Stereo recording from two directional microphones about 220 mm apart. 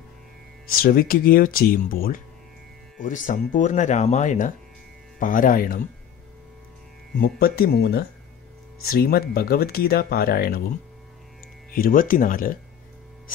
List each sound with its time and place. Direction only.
0.7 s speech: 40° left (ahead or behind)
7.2 s speech: 45° left (ahead or behind)
11.7 s speech: 40° left (ahead or behind)